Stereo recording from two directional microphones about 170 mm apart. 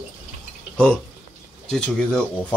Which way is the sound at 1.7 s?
5° left (ahead or behind).